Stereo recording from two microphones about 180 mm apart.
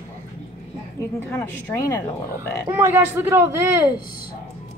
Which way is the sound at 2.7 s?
10° right (ahead or behind).